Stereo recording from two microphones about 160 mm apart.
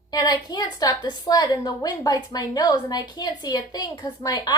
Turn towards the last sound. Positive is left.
turn(degrees=25)  # may be behind; listen again after turning